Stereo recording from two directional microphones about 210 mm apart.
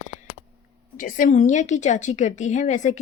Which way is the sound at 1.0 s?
40° left (ahead or behind).